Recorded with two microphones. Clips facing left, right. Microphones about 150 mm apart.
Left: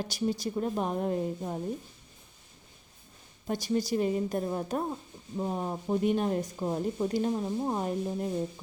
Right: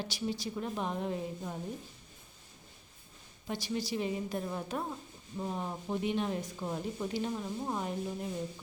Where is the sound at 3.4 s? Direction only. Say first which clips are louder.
Left 6 dB; 45° left (ahead or behind).